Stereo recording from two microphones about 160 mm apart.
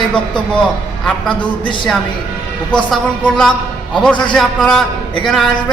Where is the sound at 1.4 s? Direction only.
30° left (ahead or behind).